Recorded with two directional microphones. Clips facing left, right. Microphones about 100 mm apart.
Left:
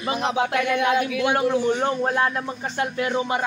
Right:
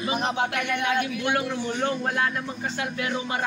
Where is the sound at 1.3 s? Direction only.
35° left (ahead or behind).